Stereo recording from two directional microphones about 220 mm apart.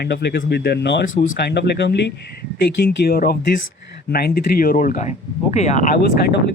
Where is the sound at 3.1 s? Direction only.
45° left (ahead or behind).